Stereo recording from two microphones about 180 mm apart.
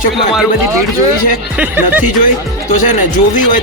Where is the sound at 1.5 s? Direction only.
10° right (ahead or behind).